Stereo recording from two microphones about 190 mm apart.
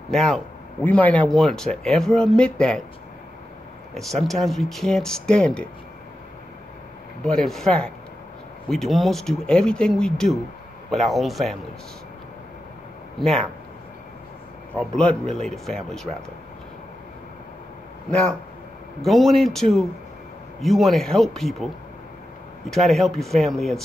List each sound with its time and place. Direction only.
0.1 s speech: centre (ahead or behind)
3.9 s speech: centre (ahead or behind)
7.2 s speech: centre (ahead or behind)
13.2 s speech: centre (ahead or behind)
14.7 s speech: 5° left (ahead or behind)
18.9 s speech: centre (ahead or behind)
22.7 s speech: centre (ahead or behind)